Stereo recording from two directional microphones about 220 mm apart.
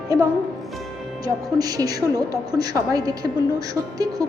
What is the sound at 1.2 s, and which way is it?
A woman's voice, 15° right (ahead or behind).